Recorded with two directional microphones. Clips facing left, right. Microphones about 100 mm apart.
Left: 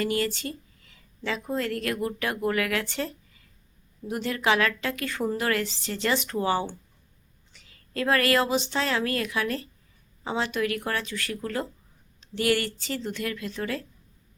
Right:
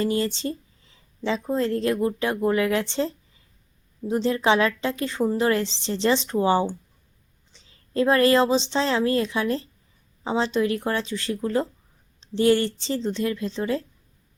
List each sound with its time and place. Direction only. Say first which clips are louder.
0.0 s a woman's voice: right 3 dB; 25° right (ahead or behind)